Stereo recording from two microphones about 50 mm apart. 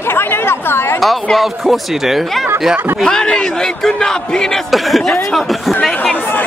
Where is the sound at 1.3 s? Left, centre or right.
Centre.